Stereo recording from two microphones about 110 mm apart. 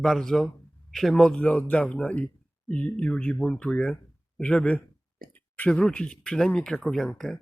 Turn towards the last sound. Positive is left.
turn(degrees=5)  # may be behind; listen again after turning